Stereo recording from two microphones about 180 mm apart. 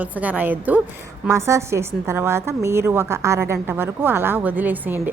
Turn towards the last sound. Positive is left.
turn(degrees=-10)  # may be behind; listen again after turning